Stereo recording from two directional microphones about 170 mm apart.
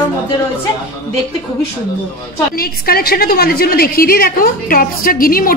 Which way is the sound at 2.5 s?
60° left (ahead or behind).